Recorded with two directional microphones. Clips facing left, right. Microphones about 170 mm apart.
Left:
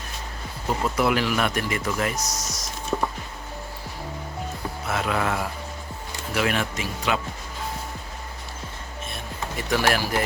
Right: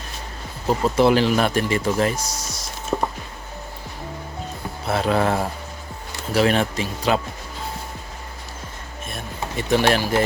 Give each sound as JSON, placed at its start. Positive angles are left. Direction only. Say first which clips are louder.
{"t": 0.9, "sound": "speech", "louder": "right 7 dB", "side_deg": -30}
{"t": 4.9, "sound": "speech", "louder": "right 6 dB", "side_deg": -35}
{"t": 9.6, "sound": "speech", "louder": "right 4 dB", "side_deg": -25}